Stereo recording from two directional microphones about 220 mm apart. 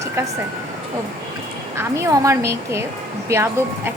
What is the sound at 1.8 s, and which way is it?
A woman's voice, 10° right (ahead or behind).